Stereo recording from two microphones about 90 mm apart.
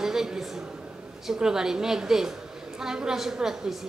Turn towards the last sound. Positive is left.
turn(degrees=-5)  # may be behind; listen again after turning